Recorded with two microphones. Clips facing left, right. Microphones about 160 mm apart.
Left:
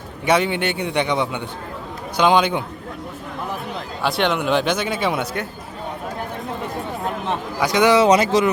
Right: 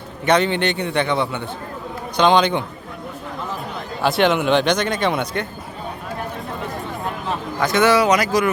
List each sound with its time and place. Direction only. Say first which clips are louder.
0.3 s a man's voice: right 1 dB; 10° left (ahead or behind)
4.0 s a man's voice: right 3 dB; centre (ahead or behind)
7.6 s a man's voice: left 1 dB; 15° left (ahead or behind)
8.0 s speech: left 2 dB; 30° left (ahead or behind)